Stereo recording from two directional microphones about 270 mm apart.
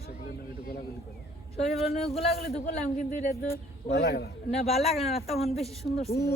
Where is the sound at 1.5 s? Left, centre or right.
Left.